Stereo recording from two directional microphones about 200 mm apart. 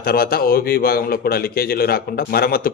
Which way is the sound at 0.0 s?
50° left (ahead or behind).